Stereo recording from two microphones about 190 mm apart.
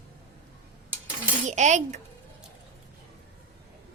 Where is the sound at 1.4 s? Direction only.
40° right (ahead or behind).